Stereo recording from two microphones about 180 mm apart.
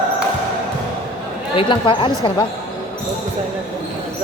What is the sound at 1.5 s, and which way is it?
Speech, 25° left (ahead or behind).